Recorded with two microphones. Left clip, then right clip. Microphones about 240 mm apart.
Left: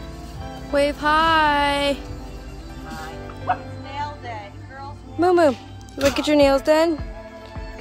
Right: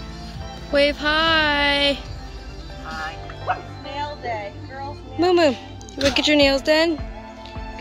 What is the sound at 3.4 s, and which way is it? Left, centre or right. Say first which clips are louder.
Music: left 1 dB; right.